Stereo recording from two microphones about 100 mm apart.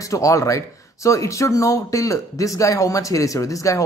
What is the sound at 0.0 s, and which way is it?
Speech, 35° left (ahead or behind).